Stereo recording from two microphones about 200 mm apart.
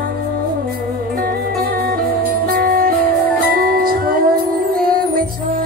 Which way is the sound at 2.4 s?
45° right (ahead or behind).